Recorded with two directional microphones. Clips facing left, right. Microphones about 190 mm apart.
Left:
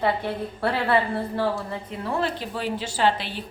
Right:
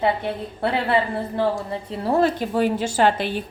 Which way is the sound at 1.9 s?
35° right (ahead or behind).